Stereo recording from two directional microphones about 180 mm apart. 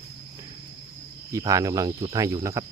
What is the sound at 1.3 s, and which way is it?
Speech, 20° right (ahead or behind).